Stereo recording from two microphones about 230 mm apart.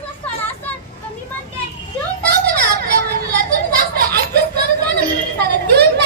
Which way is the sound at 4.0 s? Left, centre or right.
Right.